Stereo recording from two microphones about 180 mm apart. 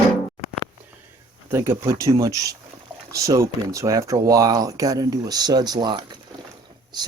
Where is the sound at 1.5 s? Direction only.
15° right (ahead or behind).